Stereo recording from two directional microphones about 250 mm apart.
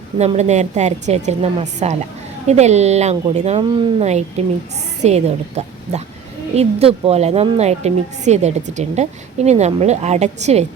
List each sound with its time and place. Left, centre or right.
0.2 s a woman's voice: right